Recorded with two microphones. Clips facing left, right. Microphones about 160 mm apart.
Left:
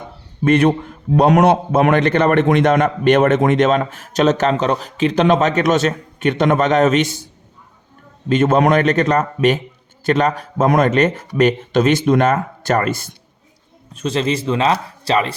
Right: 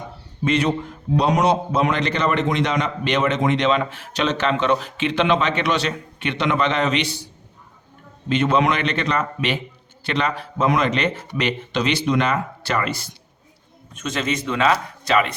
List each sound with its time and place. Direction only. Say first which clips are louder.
0.4 s a man's voice: left 6 dB; 55° left (ahead or behind)
8.3 s a man's voice: left 5 dB; 45° left (ahead or behind)
13.9 s speech: left 5 dB; 30° left (ahead or behind)